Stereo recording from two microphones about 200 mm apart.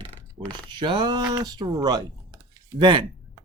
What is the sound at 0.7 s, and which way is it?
Speech, 25° right (ahead or behind).